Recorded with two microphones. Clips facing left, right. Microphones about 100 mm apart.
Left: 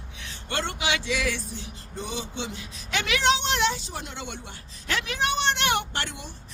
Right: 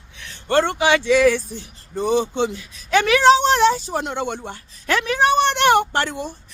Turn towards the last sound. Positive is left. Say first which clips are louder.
# right 10 dB
turn(degrees=-45)  # may be behind; listen again after turning